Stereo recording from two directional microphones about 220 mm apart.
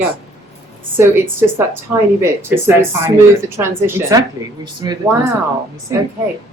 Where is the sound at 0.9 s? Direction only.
10° right (ahead or behind).